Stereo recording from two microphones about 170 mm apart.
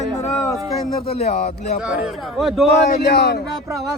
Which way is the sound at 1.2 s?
40° left (ahead or behind).